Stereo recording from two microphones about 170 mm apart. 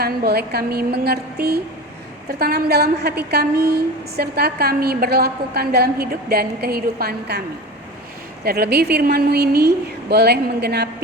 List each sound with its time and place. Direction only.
0.0 s a woman's voice: 70° right (ahead or behind)
8.4 s a woman's voice: 65° right (ahead or behind)